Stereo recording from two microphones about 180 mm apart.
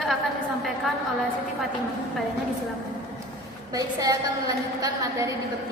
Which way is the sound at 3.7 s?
20° right (ahead or behind).